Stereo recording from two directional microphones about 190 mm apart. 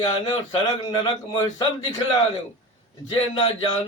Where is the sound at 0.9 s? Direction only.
25° left (ahead or behind).